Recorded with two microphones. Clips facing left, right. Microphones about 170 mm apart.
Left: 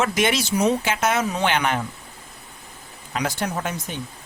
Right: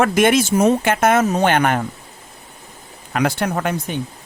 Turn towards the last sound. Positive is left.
turn(degrees=-60)  # may be behind; listen again after turning